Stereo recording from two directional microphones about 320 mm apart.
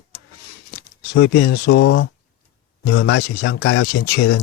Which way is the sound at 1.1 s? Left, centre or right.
Left.